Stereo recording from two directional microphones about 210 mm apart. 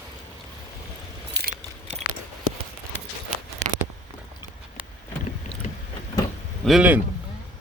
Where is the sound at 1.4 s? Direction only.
55° right (ahead or behind).